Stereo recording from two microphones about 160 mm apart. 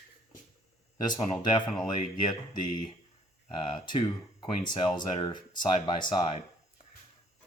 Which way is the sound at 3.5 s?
30° left (ahead or behind).